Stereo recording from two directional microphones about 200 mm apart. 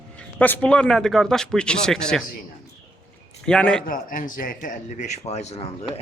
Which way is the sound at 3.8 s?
45° left (ahead or behind).